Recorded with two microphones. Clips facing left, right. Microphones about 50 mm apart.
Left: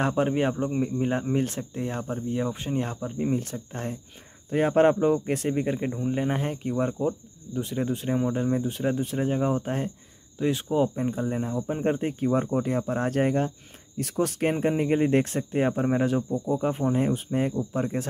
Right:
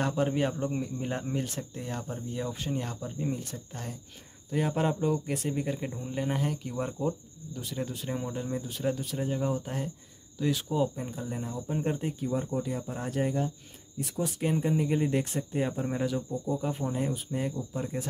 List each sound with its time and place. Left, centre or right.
0.0 s speech: left
7.5 s speech: left
10.4 s speech: left
13.9 s speech: left